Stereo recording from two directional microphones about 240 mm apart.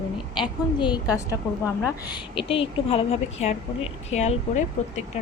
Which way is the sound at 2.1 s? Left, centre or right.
Left.